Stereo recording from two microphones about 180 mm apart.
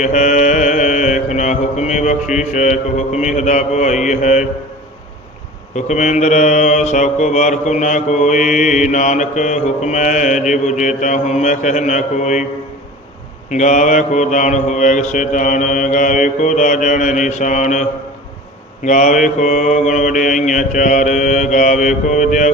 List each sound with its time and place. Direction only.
0.0 s mantra: 40° left (ahead or behind)
5.7 s mantra: 40° left (ahead or behind)
13.5 s mantra: 45° left (ahead or behind)
18.9 s mantra: 45° left (ahead or behind)